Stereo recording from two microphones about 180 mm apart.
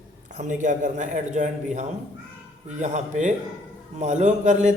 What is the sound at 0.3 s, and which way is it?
Speech, 45° right (ahead or behind).